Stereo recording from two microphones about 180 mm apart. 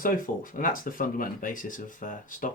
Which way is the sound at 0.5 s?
50° left (ahead or behind).